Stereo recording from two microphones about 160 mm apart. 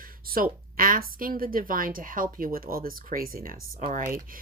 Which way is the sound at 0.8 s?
65° right (ahead or behind).